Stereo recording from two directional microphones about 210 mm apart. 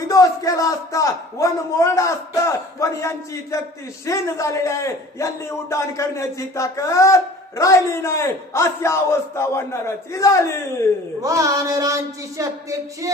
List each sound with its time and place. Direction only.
0.1 s a man's voice: 15° left (ahead or behind)
11.2 s speech: 15° right (ahead or behind)